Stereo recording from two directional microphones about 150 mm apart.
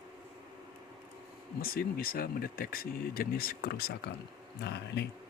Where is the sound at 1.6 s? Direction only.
75° left (ahead or behind).